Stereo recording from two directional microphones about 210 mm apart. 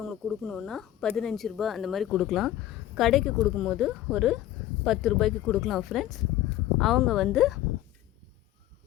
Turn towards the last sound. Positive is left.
turn(degrees=0)  # may be behind; listen again after turning